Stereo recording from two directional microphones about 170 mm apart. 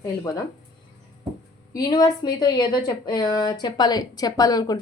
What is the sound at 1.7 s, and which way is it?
Speech, 25° left (ahead or behind).